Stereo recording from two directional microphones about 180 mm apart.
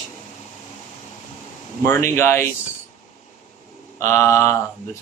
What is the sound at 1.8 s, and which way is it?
Speech, 15° left (ahead or behind).